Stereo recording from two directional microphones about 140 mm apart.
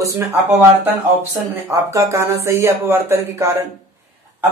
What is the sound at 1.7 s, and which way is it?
Speech, 20° right (ahead or behind).